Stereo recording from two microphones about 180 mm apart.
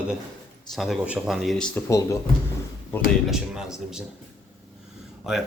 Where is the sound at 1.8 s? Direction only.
15° left (ahead or behind).